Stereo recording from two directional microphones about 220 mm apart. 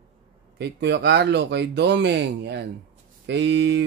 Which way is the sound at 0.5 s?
50° right (ahead or behind).